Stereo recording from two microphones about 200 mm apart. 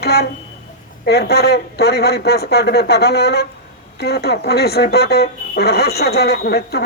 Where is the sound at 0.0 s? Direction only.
55° left (ahead or behind).